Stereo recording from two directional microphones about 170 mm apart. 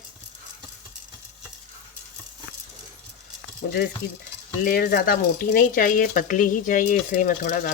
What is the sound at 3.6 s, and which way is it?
Stir, 80° left.